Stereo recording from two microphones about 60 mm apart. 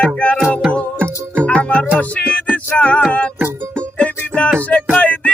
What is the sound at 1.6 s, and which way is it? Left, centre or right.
Music, left.